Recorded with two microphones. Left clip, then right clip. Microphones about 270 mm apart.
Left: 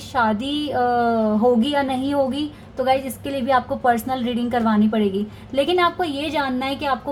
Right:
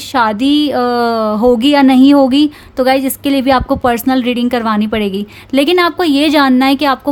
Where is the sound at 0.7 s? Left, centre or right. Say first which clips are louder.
Right 6 dB; right.